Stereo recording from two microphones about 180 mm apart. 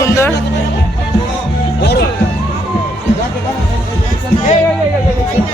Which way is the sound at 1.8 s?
70° left (ahead or behind).